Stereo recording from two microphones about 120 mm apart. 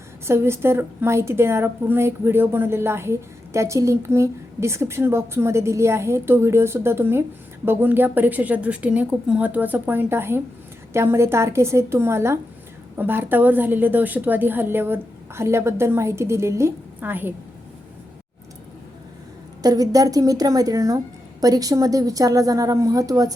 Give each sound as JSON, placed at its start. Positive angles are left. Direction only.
{"t": 0.3, "sound": "a woman's voice", "side_deg": -20}
{"t": 19.6, "sound": "a woman's voice", "side_deg": -30}